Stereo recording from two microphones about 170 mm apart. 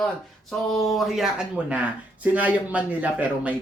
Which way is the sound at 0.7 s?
Centre (ahead or behind).